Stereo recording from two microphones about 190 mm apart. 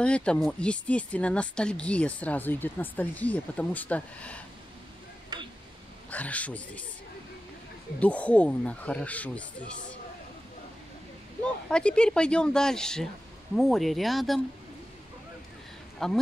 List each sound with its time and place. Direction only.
0.0 s speech: 5° left (ahead or behind)
5.3 s tick-tock: 20° right (ahead or behind)
6.0 s speech: 10° left (ahead or behind)
8.0 s speech: 5° left (ahead or behind)
11.7 s speech: 5° left (ahead or behind)
16.0 s speech: centre (ahead or behind)